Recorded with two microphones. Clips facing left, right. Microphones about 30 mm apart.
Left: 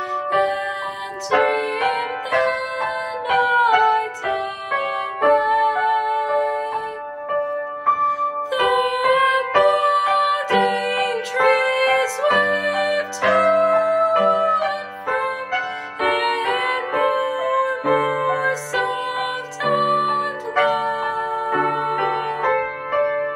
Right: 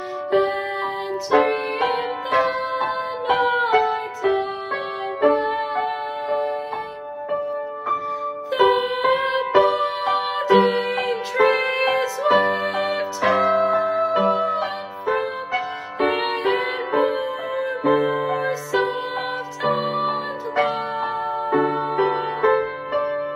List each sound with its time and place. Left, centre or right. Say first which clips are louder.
0.3 s music: right 1 dB; left
7.2 s music: left 2 dB; left
19.8 s music: left 4 dB; centre
20.5 s music: left 3 dB; left
22.6 s music: left 2 dB; left